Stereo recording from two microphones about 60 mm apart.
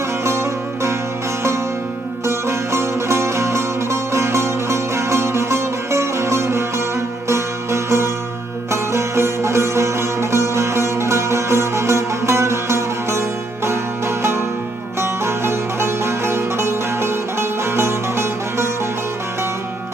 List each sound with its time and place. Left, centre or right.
0.3 s music: right
2.2 s music: right